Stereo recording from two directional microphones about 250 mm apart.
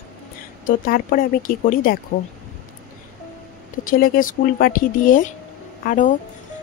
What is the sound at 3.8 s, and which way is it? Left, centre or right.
Speech, left.